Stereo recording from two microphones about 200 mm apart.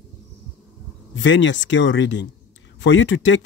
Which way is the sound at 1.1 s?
65° left (ahead or behind).